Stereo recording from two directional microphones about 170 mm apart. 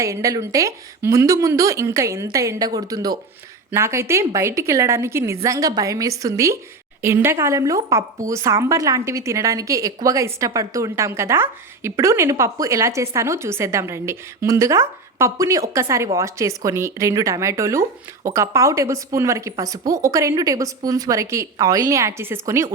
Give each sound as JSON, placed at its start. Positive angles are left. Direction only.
{"t": 0.0, "sound": "a woman's voice", "side_deg": -20}